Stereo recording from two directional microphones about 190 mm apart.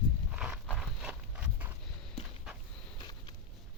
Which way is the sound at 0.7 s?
5° right (ahead or behind).